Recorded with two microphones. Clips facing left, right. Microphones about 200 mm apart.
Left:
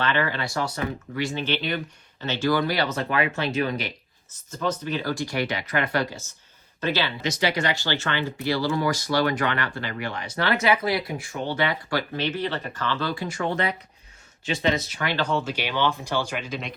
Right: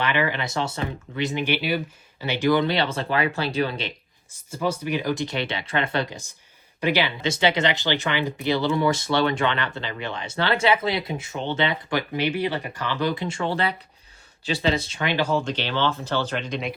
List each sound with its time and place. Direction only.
0.0 s speech: 15° right (ahead or behind)
4.3 s speech: 10° right (ahead or behind)
7.2 s speech: 25° right (ahead or behind)
15.2 s speech: 5° right (ahead or behind)
15.4 s speech: 10° left (ahead or behind)